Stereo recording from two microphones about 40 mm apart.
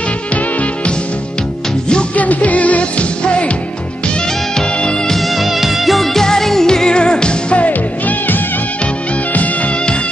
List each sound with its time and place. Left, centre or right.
2.1 s music: left
5.1 s music: centre
6.2 s music: centre; by 7.7 s left